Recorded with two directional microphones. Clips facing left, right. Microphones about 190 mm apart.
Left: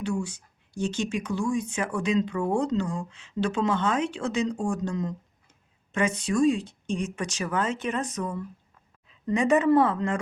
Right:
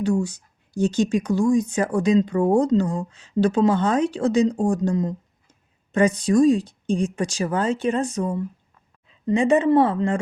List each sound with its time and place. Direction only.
0.0 s speech: 40° right (ahead or behind)